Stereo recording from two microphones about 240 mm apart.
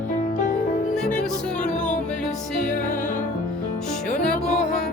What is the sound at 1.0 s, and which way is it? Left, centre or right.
Music, centre.